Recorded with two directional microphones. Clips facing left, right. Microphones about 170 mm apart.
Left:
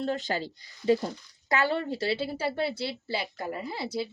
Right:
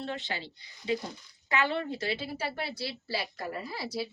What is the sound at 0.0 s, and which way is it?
Speech, 40° left (ahead or behind).